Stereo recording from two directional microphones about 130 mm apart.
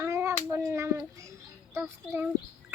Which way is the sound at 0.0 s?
20° right (ahead or behind).